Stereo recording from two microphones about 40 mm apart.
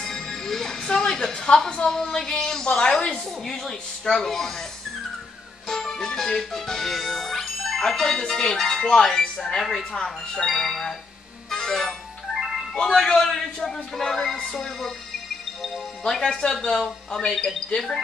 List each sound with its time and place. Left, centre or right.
0.0 s music: centre
1.9 s a man's voice: centre; by 3.2 s left
3.4 s a man's voice: centre
5.7 s music: centre
8.2 s a man's voice: centre
9.6 s a man's voice: centre
11.5 s music: centre
12.4 s music: centre
12.9 s a man's voice: centre
16.1 s speech: centre
16.4 s a man's voice: centre